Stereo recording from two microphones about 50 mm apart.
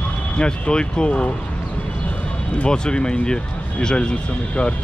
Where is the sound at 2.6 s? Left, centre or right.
Centre.